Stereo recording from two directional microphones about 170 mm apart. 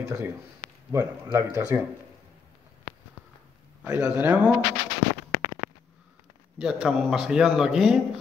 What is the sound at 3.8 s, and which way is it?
Speech, 5° right (ahead or behind).